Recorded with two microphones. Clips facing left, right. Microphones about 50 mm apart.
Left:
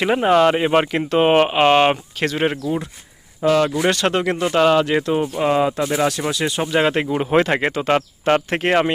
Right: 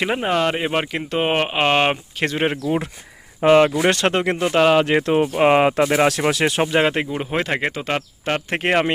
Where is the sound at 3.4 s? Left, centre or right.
Right.